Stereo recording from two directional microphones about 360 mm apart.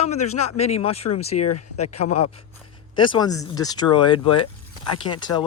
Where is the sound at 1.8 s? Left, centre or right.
Left.